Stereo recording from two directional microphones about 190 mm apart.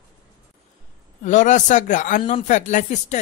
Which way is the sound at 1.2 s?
40° left (ahead or behind).